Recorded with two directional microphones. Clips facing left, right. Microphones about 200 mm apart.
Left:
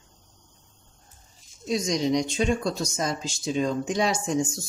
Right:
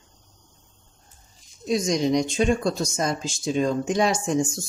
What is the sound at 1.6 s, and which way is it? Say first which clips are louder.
Speech: right 3 dB; 50° right (ahead or behind).